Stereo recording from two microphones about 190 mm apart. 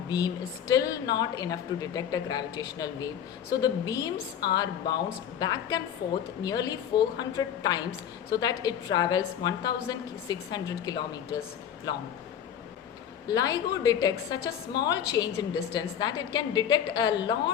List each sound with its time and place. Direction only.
0.7 s a woman's voice: 20° left (ahead or behind)
6.0 s a woman's voice: 60° left (ahead or behind)
6.4 s a woman's voice: 20° left (ahead or behind)
13.2 s a woman's voice: 20° left (ahead or behind)